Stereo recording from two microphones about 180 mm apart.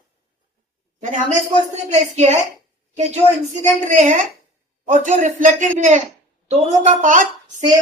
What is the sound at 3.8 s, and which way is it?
A woman's voice, 45° right (ahead or behind).